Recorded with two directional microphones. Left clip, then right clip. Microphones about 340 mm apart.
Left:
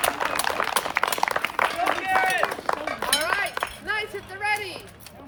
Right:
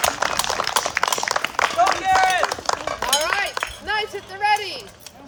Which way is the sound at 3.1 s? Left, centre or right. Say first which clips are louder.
Right 3 dB; centre.